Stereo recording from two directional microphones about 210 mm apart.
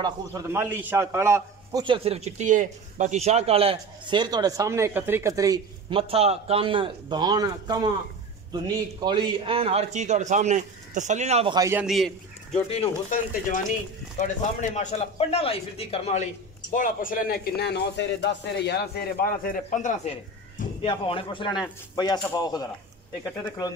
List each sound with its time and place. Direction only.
0.0 s a man's voice: 10° right (ahead or behind); by 11.5 s 30° right (ahead or behind)
11.5 s a man's voice: 15° right (ahead or behind)
11.8 s a man's voice: centre (ahead or behind)
12.6 s a man's voice: 30° left (ahead or behind)
20.8 s speech: 25° left (ahead or behind)